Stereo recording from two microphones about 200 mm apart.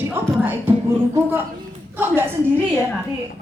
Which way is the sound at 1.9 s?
10° right (ahead or behind).